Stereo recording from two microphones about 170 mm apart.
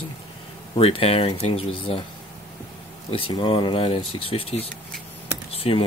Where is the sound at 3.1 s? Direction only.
30° left (ahead or behind).